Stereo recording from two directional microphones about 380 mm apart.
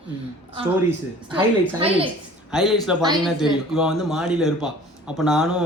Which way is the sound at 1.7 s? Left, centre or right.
Centre.